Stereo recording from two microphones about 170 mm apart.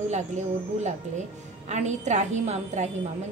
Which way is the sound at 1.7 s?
45° right (ahead or behind).